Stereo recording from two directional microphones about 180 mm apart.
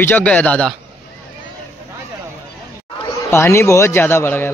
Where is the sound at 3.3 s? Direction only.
15° left (ahead or behind).